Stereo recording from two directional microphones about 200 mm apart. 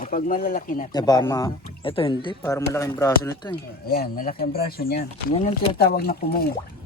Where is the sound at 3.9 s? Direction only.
45° left (ahead or behind).